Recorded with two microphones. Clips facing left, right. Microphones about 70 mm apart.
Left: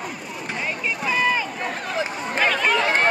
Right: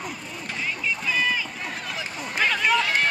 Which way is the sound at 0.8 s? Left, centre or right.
Left.